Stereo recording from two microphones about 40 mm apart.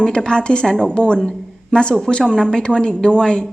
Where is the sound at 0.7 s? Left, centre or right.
Centre.